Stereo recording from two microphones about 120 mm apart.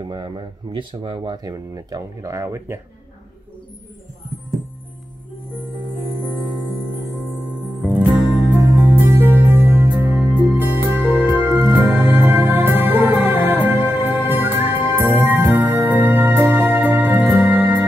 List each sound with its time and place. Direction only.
0.0 s speech: 40° right (ahead or behind)
1.4 s speech: 30° right (ahead or behind)
5.8 s music: 40° left (ahead or behind)
7.8 s music: 10° right (ahead or behind)